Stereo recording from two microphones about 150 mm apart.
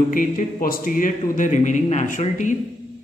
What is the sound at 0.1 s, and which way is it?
Speech, 65° left (ahead or behind).